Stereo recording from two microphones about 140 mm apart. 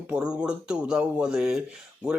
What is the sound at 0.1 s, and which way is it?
Speech, 5° right (ahead or behind).